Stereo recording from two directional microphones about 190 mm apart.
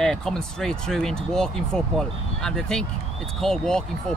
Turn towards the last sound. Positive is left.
turn(degrees=5)  # may be behind; listen again after turning